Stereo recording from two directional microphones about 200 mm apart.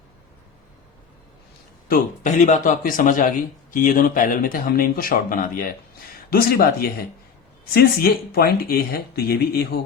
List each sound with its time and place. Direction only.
1.9 s a man's voice: 40° left (ahead or behind)